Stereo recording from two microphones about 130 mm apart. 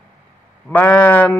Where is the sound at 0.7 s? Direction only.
15° left (ahead or behind).